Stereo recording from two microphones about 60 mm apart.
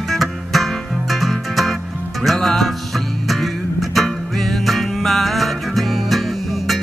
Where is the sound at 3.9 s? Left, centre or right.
Centre.